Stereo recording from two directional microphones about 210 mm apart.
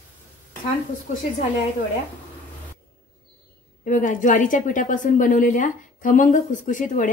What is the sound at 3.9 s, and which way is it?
Speech, 40° left (ahead or behind).